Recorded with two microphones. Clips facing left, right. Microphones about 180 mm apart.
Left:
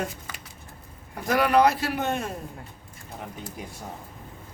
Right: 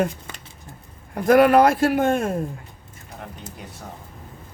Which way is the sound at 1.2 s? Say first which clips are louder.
Right 6 dB; 50° right (ahead or behind).